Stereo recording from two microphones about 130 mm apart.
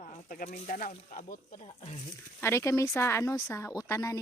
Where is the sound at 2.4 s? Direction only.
20° left (ahead or behind).